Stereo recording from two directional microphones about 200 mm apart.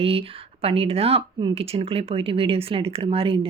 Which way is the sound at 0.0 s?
30° right (ahead or behind).